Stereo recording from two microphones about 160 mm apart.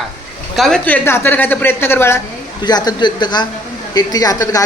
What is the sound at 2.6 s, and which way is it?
A man's voice, 25° left (ahead or behind).